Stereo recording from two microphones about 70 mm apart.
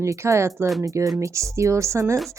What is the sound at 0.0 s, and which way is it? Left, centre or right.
Speech, right.